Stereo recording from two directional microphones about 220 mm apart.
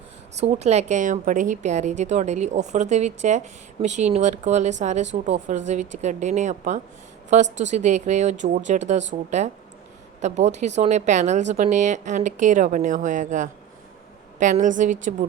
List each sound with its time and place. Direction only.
0.3 s a woman's voice: 30° right (ahead or behind)
10.2 s a woman's voice: 30° right (ahead or behind)